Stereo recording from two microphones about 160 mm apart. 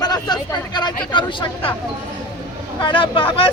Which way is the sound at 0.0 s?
25° left (ahead or behind).